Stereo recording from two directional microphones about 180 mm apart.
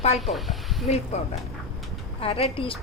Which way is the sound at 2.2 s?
30° left (ahead or behind).